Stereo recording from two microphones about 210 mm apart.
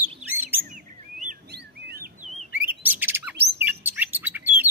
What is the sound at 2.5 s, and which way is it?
Bird, 10° right (ahead or behind).